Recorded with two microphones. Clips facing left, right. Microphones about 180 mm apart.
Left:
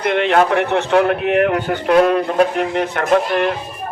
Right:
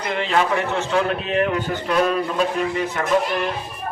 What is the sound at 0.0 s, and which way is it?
A man's voice, 65° left (ahead or behind).